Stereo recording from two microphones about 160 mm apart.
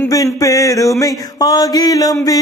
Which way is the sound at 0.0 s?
20° left (ahead or behind).